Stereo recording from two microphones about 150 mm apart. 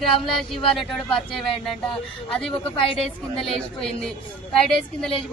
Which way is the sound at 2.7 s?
35° left (ahead or behind).